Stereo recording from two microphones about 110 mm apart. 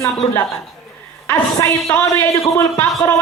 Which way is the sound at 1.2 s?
20° left (ahead or behind).